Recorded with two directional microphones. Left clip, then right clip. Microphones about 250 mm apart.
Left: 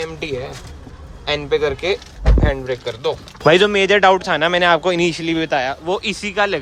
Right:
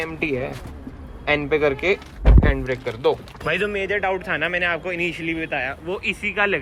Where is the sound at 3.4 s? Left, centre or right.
Left.